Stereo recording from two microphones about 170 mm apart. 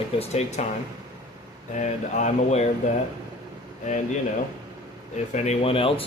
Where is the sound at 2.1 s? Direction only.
40° left (ahead or behind).